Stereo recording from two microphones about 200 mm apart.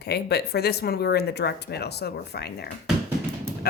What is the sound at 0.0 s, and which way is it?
Speech, 55° left (ahead or behind).